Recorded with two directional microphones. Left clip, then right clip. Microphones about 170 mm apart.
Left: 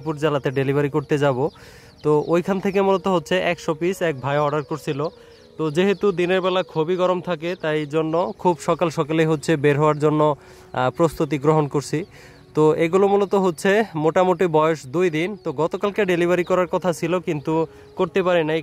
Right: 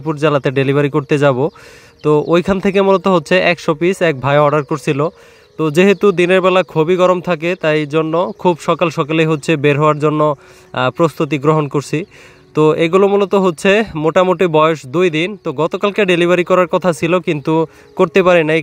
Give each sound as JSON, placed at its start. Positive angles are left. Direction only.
{"t": 0.0, "sound": "speech", "side_deg": -25}